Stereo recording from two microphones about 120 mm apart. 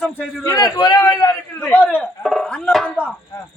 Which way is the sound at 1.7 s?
15° left (ahead or behind).